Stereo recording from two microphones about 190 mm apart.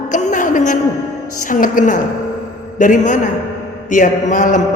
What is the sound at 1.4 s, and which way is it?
A man's voice, 45° left (ahead or behind).